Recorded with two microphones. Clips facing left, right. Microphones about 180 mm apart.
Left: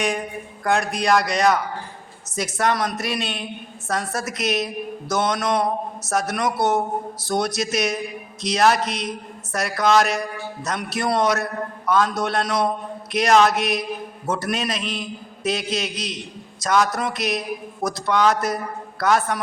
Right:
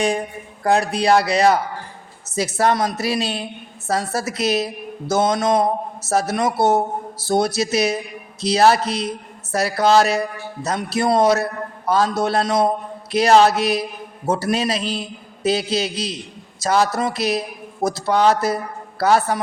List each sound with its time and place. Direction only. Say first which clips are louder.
0.6 s a man's voice: right 4 dB; 30° right (ahead or behind)